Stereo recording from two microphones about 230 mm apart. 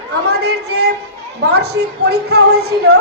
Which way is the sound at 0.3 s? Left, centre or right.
Right.